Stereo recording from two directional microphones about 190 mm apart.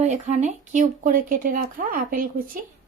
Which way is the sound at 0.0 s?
35° right (ahead or behind).